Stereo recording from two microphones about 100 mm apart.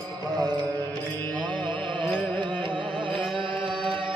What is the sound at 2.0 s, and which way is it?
Carnatic music, 10° left (ahead or behind).